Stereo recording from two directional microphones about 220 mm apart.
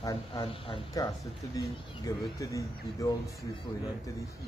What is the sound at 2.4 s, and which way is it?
Speech, 15° left (ahead or behind).